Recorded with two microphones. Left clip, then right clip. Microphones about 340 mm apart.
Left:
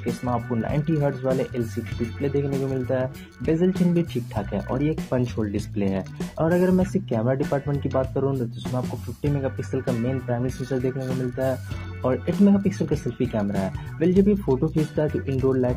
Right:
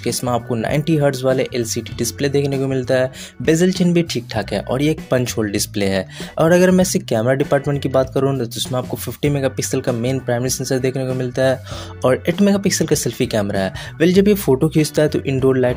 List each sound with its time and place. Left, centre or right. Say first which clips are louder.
0.2 s speech: right 6 dB; right
12.0 s speech: right 7 dB; right